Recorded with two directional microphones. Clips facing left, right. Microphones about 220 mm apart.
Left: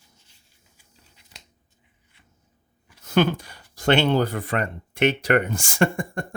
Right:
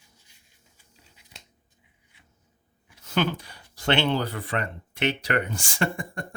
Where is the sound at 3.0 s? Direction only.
45° left (ahead or behind).